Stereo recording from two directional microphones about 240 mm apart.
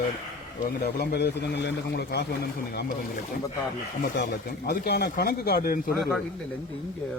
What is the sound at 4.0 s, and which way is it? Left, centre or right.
Speech, left.